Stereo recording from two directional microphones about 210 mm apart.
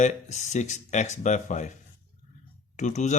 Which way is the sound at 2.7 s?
35° left (ahead or behind).